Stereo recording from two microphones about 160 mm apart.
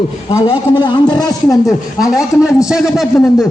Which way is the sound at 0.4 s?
30° left (ahead or behind).